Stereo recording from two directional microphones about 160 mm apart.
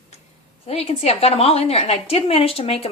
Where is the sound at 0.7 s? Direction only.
40° left (ahead or behind).